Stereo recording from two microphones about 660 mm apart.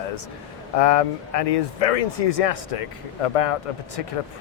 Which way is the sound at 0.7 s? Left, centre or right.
Left.